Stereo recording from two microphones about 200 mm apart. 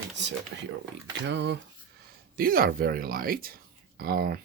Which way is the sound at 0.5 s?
60° right (ahead or behind).